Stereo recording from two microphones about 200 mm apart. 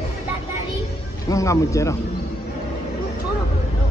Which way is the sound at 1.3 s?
15° left (ahead or behind).